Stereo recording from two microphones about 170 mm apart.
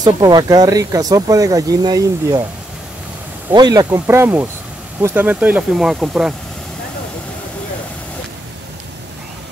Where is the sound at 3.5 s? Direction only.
25° right (ahead or behind); by 6.4 s 5° right (ahead or behind).